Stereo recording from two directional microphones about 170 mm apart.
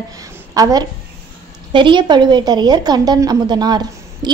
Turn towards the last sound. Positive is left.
turn(degrees=-25)  # may be behind; listen again after turning